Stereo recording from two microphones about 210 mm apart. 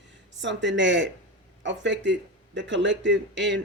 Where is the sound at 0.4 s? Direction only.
60° right (ahead or behind).